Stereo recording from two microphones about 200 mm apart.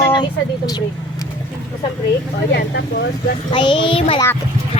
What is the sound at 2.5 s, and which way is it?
Speech, 60° left (ahead or behind).